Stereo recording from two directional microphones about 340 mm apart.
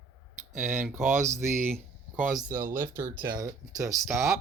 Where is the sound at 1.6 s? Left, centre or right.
Centre.